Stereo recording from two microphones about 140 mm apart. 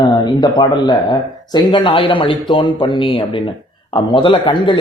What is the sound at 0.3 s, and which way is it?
A man's voice, 30° left (ahead or behind).